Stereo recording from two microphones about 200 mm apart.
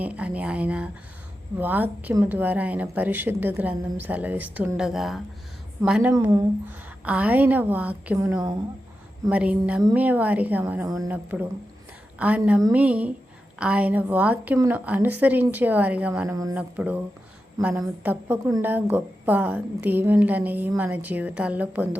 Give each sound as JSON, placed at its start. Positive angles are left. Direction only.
{"t": 0.0, "sound": "a woman's voice", "side_deg": -5}
{"t": 6.1, "sound": "speech", "side_deg": -20}
{"t": 6.7, "sound": "a woman's voice", "side_deg": -5}